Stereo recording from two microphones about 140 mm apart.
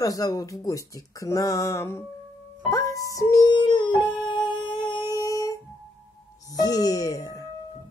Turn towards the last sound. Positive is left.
turn(degrees=25)  # may be behind; listen again after turning